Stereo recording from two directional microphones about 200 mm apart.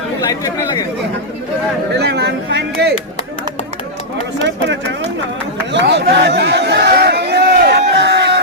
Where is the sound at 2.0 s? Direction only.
55° right (ahead or behind).